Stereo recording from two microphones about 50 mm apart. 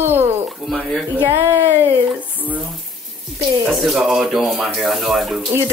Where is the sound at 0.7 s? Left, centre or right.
Centre.